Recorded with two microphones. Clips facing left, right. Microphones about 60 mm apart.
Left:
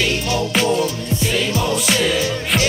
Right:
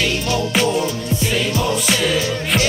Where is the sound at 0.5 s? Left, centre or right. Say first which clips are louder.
Right 1 dB; centre.